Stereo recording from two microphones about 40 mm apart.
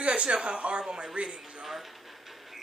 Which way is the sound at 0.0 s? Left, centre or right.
Right.